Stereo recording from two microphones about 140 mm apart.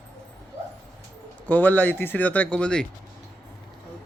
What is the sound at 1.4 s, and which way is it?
Speech, 10° left (ahead or behind).